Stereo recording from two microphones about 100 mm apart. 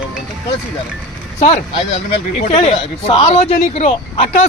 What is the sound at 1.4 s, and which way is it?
Speech, 65° left (ahead or behind).